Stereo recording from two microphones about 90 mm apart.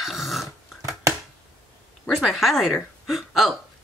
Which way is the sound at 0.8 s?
35° right (ahead or behind).